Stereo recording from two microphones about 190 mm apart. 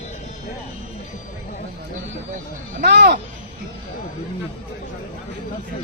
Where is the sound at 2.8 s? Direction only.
60° right (ahead or behind).